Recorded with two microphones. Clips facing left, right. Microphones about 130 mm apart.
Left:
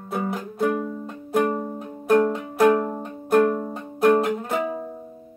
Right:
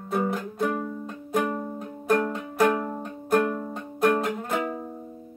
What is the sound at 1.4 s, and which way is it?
Music, 15° left (ahead or behind).